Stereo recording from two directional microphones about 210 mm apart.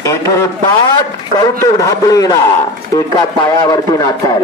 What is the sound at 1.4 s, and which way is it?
Speech, 15° left (ahead or behind).